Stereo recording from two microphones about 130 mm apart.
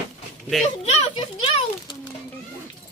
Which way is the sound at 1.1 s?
45° left (ahead or behind).